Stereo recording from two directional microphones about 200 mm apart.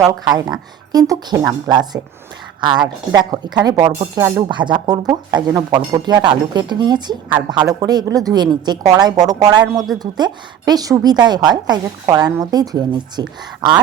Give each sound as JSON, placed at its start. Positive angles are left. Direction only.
{"t": 0.3, "sound": "a woman's voice", "side_deg": -20}